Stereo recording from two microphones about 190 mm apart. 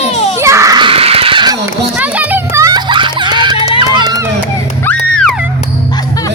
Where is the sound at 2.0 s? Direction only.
10° right (ahead or behind).